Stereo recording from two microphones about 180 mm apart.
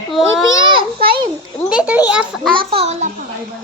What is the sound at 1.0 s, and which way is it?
Speech, 30° right (ahead or behind).